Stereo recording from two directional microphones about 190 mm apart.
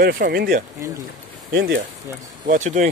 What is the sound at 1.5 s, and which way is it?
Speech, 55° right (ahead or behind).